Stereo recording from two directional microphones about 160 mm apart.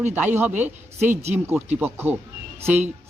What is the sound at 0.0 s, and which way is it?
A man's voice, 10° right (ahead or behind).